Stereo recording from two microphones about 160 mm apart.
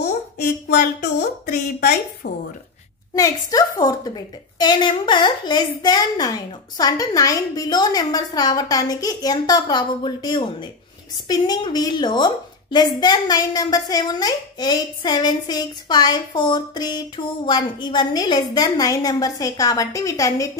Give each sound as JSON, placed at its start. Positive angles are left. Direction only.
{"t": 0.7, "sound": "a woman's voice", "side_deg": 55}
{"t": 3.2, "sound": "a woman's voice", "side_deg": 20}